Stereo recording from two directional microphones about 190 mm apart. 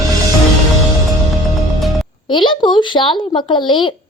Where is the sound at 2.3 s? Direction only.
25° left (ahead or behind).